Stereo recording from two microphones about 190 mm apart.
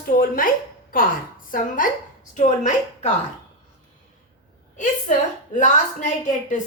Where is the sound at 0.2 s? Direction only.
50° left (ahead or behind).